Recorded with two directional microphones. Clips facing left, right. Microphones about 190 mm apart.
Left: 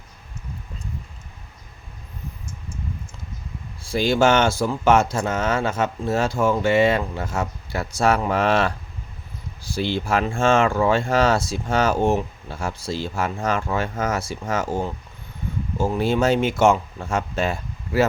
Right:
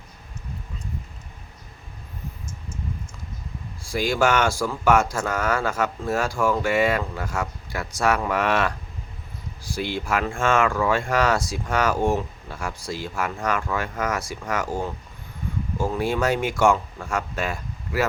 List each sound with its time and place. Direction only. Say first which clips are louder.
3.9 s speech: left 3 dB; 25° left (ahead or behind)
9.7 s speech: left 3 dB; 25° left (ahead or behind)